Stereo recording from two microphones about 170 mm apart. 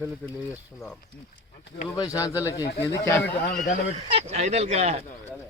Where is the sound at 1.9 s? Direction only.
20° left (ahead or behind).